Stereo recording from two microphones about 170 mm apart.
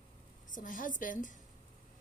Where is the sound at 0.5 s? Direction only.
50° left (ahead or behind).